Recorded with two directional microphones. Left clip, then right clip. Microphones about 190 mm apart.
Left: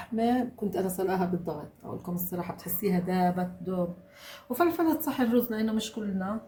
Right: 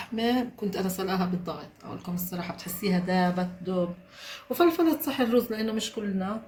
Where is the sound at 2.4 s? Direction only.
60° left (ahead or behind).